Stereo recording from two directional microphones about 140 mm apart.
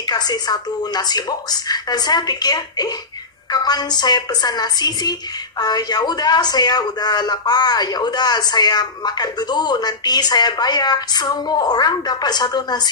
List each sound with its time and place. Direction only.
0.0 s a woman's voice: 30° left (ahead or behind)